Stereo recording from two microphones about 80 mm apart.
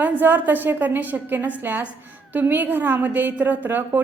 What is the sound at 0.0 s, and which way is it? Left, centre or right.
A woman's voice, right.